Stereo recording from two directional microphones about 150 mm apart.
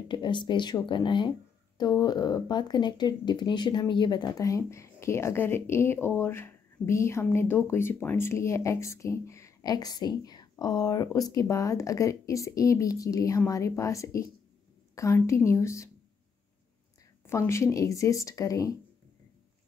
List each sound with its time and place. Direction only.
0.1 s speech: 30° left (ahead or behind)
17.3 s speech: 15° left (ahead or behind)